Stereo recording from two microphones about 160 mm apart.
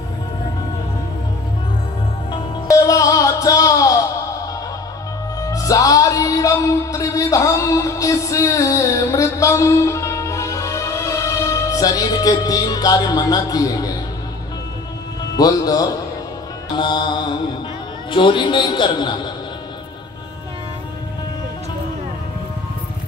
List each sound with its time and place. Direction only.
2.7 s music: 20° left (ahead or behind)
5.4 s music: 20° left (ahead or behind)
15.3 s a man's voice: 25° left (ahead or behind)